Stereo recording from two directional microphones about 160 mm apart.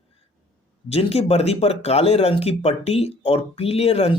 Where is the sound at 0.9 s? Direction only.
40° left (ahead or behind).